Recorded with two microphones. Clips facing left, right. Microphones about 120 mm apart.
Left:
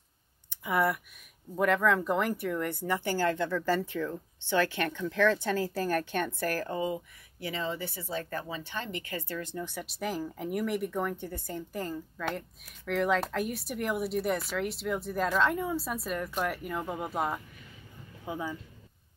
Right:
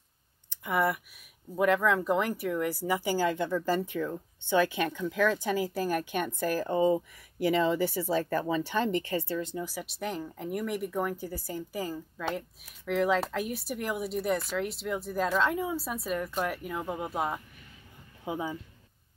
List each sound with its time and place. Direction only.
0.5 s speech: centre (ahead or behind); by 6.8 s 15° right (ahead or behind)
7.4 s speech: 40° right (ahead or behind)
9.4 s speech: 15° right (ahead or behind)
9.7 s speech: centre (ahead or behind)
18.2 s speech: 20° right (ahead or behind)